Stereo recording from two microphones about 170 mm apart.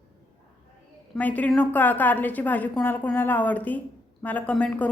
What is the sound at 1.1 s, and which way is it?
A woman's voice, 10° left (ahead or behind).